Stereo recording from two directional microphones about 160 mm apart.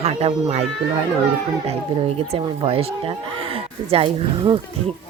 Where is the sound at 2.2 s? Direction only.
40° right (ahead or behind).